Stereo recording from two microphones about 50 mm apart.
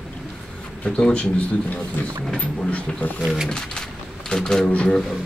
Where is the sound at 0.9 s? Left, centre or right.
Centre.